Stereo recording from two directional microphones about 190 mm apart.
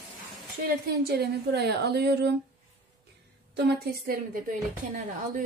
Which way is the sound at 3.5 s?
55° right (ahead or behind).